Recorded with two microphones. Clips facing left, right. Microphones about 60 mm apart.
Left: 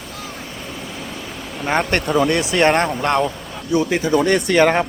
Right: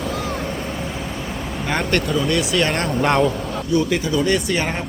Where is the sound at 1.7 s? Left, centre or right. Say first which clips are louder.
Left 3 dB; left.